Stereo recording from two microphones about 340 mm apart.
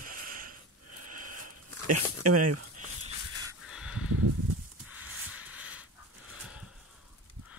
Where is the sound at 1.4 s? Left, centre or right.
Right.